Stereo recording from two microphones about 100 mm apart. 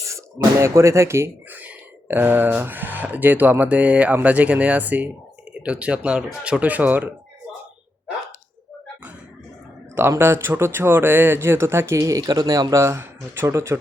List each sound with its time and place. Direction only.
0.1 s speech: 30° right (ahead or behind)
9.9 s speech: 20° right (ahead or behind)